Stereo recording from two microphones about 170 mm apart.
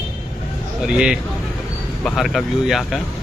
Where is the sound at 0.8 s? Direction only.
5° right (ahead or behind).